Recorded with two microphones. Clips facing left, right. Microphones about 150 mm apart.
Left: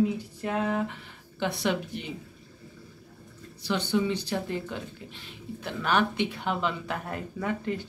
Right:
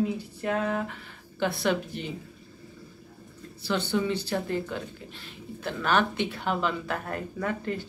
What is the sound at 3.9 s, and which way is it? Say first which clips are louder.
Speech: left 2 dB; 15° left (ahead or behind).